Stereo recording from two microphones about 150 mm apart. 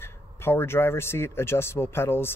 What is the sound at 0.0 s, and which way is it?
Speech, 15° left (ahead or behind).